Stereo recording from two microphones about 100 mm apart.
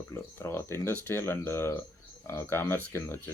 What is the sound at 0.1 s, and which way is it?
Speech, 25° left (ahead or behind).